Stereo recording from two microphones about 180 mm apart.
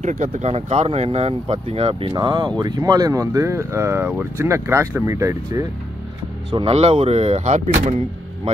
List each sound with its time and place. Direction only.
0.0 s speech: 40° right (ahead or behind); by 5.7 s 20° right (ahead or behind)
6.5 s speech: 35° right (ahead or behind)